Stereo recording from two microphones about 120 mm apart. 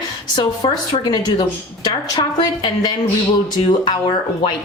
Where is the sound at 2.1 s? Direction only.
35° left (ahead or behind).